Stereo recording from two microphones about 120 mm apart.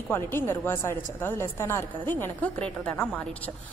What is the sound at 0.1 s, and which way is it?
A woman's voice, 20° left (ahead or behind).